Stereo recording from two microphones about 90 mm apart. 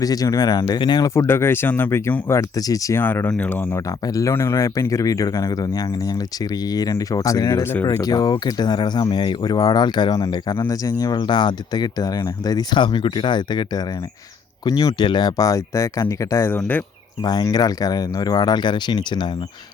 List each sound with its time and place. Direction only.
0.0 s speech: 45° left (ahead or behind)
1.0 s speech: 40° left (ahead or behind)
1.3 s speech: 25° left (ahead or behind)
2.6 s speech: 40° left (ahead or behind)
3.0 s speech: 20° left (ahead or behind)
4.0 s speech: 40° left (ahead or behind)
8.0 s speech: 45° left (ahead or behind)
10.8 s speech: 40° left (ahead or behind)
11.2 s speech: 60° left (ahead or behind)
12.8 s speech: 65° left (ahead or behind)
14.6 s speech: 40° left (ahead or behind)
14.9 s speech: 55° left (ahead or behind); by 16.5 s 35° left (ahead or behind)
17.5 s speech: 45° left (ahead or behind)